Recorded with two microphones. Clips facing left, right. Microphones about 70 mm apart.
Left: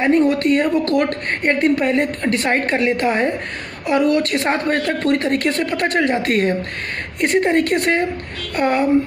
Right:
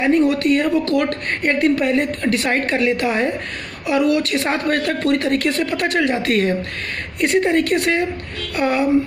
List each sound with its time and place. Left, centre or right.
0.0 s a woman's voice: left
4.6 s a woman's voice: left